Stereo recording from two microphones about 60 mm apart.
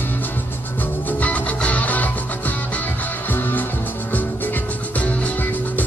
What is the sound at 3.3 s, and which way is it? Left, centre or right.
Music, left.